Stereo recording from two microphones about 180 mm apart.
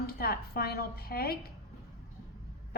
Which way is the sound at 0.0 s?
60° left (ahead or behind).